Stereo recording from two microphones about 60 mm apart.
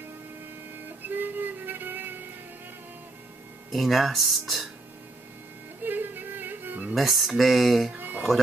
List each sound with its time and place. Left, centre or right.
1.0 s music: right
3.7 s speech: centre
5.9 s music: right
7.0 s speech: centre
7.9 s music: right